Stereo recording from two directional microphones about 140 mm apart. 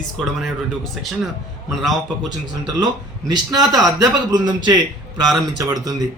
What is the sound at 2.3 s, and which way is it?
A man's voice, 30° right (ahead or behind).